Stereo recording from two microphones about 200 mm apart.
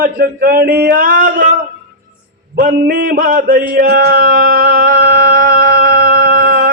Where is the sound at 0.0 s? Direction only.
45° right (ahead or behind).